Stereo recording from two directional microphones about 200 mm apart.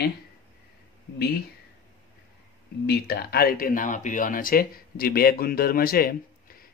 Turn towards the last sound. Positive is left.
turn(degrees=50)  # may be behind; listen again after turning